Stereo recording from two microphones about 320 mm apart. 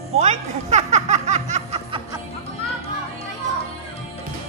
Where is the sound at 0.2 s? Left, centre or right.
Right.